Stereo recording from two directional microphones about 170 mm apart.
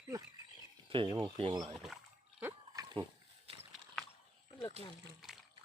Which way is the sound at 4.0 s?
Centre (ahead or behind).